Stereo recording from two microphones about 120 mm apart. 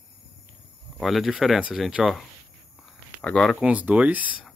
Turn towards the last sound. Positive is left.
turn(degrees=-15)  # may be behind; listen again after turning